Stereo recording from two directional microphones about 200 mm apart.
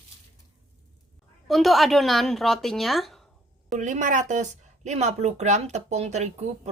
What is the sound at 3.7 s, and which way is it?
Speech, 40° right (ahead or behind).